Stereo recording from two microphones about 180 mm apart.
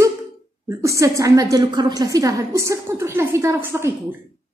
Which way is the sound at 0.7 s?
15° right (ahead or behind).